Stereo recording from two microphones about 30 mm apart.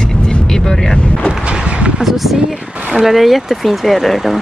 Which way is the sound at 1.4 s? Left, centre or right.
Right.